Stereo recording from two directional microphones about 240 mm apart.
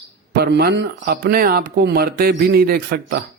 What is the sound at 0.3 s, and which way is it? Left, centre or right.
A man's voice, right.